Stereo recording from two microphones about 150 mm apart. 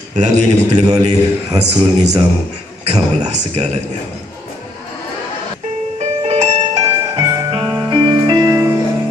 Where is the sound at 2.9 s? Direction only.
45° right (ahead or behind).